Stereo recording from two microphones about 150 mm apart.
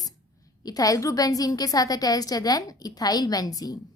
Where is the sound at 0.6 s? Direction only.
25° left (ahead or behind).